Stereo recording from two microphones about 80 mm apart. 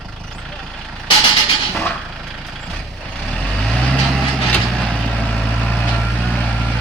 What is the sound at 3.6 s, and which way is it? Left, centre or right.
Vehicle, centre.